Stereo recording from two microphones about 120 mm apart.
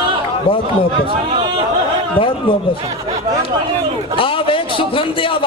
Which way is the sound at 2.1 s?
45° left (ahead or behind).